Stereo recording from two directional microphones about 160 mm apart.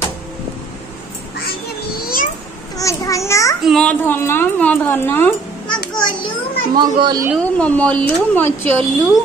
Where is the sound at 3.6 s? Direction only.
Centre (ahead or behind).